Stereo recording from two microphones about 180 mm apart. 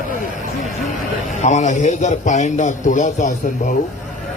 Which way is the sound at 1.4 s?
40° left (ahead or behind).